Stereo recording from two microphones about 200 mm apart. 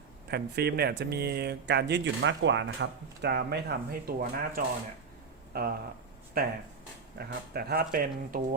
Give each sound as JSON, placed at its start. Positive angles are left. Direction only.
{"t": 0.3, "sound": "speech", "side_deg": -55}
{"t": 3.2, "sound": "speech", "side_deg": -55}